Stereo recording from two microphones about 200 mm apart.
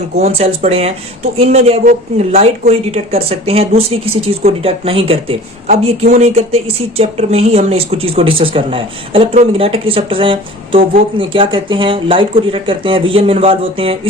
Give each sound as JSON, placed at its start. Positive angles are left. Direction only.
{"t": 0.2, "sound": "speech", "side_deg": -30}